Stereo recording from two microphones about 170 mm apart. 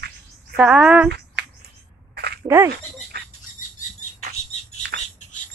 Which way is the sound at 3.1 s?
70° right (ahead or behind).